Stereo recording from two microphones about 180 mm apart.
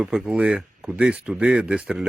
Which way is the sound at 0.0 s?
5° right (ahead or behind).